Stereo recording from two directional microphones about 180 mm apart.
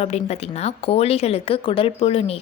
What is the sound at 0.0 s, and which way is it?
A woman's voice, 35° left (ahead or behind).